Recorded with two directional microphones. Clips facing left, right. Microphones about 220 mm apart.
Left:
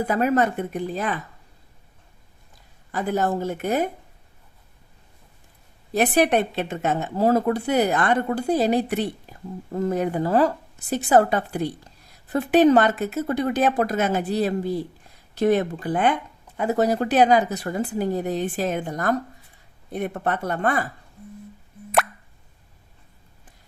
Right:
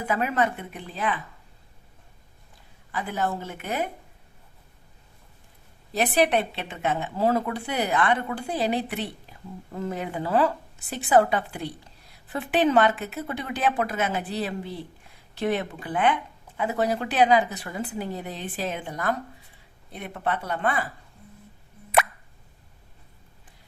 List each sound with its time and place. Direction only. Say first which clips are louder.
0.0 s speech: left 5 dB; 40° left (ahead or behind)
2.9 s speech: left 5 dB; 40° left (ahead or behind)
5.9 s a woman's voice: left 3 dB; 50° left (ahead or behind)